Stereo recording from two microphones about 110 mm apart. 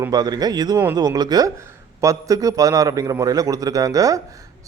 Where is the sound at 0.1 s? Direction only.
35° right (ahead or behind).